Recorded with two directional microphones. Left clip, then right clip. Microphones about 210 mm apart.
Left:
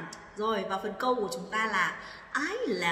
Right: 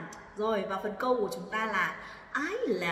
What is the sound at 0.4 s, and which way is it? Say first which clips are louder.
A man's voice: even; centre (ahead or behind).